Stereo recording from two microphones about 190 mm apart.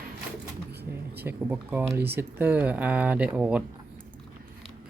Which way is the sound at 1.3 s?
10° right (ahead or behind).